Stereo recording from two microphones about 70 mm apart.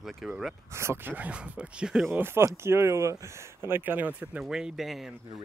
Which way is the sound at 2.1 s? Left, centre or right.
Right.